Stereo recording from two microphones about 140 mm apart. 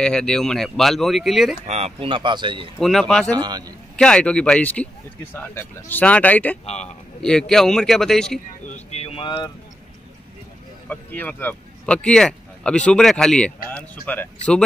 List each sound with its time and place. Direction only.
0.0 s speech: 5° left (ahead or behind)
1.7 s speech: 50° right (ahead or behind)
2.8 s speech: centre (ahead or behind)
3.3 s speech: 30° right (ahead or behind)
3.9 s speech: 5° left (ahead or behind)
6.6 s a man's voice: 50° left (ahead or behind)
7.2 s speech: 5° left (ahead or behind)
8.6 s a sound: 50° left (ahead or behind)
10.9 s speech: 10° left (ahead or behind)